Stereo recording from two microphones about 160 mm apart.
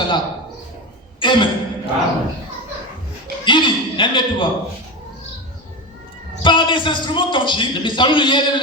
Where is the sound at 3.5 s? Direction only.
30° left (ahead or behind).